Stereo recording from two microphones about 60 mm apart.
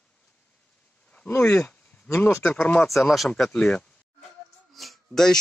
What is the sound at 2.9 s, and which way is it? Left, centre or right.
Speech, centre.